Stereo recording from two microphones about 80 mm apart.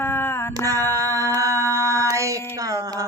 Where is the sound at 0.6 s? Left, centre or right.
Right.